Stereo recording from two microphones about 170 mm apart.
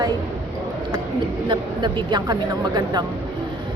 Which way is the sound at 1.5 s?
25° right (ahead or behind).